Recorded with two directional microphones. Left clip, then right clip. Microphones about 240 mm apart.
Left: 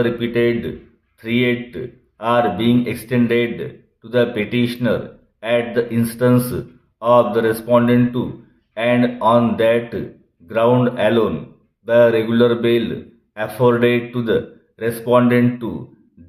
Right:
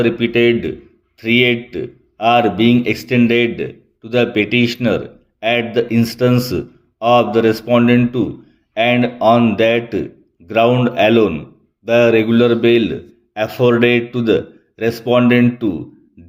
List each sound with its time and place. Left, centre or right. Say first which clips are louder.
0.3 s a man's voice: right 4 dB; right